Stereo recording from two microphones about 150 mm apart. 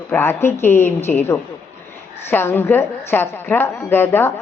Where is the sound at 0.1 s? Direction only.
15° left (ahead or behind).